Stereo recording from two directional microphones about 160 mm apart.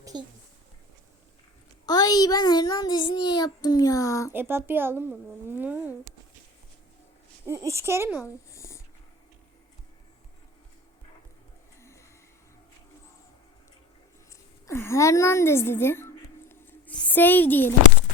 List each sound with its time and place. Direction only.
0.0 s a sound: 25° right (ahead or behind)
1.9 s a child's voice: 25° left (ahead or behind)
4.3 s speech: 15° right (ahead or behind)
7.4 s speech: 15° right (ahead or behind)
8.2 s speech: 20° left (ahead or behind)
11.8 s a sound: 20° left (ahead or behind)
14.7 s a woman's voice: 15° left (ahead or behind)